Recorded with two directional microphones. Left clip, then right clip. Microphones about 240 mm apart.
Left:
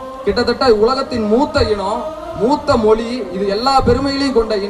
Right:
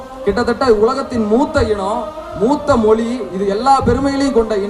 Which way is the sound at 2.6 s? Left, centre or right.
Right.